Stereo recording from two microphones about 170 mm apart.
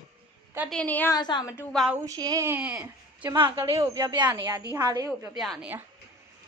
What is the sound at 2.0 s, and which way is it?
Speech, 20° right (ahead or behind).